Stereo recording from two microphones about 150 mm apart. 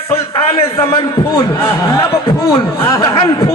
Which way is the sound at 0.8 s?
25° left (ahead or behind).